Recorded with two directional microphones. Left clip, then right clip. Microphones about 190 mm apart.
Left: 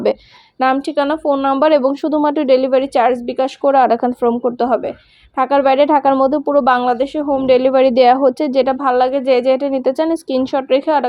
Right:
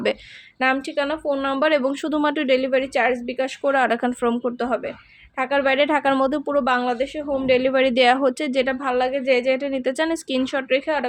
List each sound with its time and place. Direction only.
0.6 s speech: 20° left (ahead or behind)
1.8 s speech: 5° right (ahead or behind)
2.6 s a woman's voice: 15° left (ahead or behind)
3.6 s speech: 5° left (ahead or behind)
5.4 s speech: 20° left (ahead or behind); by 6.4 s 5° right (ahead or behind)
6.7 s a woman's voice: 20° left (ahead or behind)
7.7 s speech: 5° left (ahead or behind)
8.8 s a woman's voice: 20° left (ahead or behind)
9.7 s speech: centre (ahead or behind)
10.7 s a woman's voice: 20° left (ahead or behind)